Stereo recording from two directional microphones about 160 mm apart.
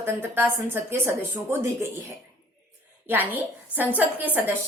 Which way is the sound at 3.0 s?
10° right (ahead or behind).